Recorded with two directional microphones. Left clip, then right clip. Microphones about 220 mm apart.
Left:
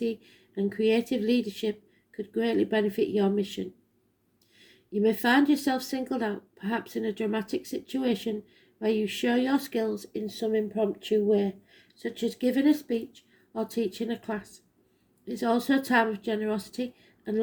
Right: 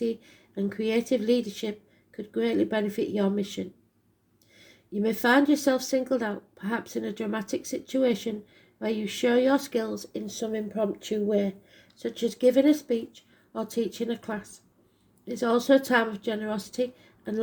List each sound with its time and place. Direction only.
0.0 s a woman's voice: 30° right (ahead or behind)
4.9 s a woman's voice: 30° right (ahead or behind)